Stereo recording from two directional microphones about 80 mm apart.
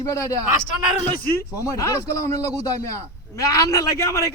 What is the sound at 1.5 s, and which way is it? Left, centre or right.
A man's voice, left.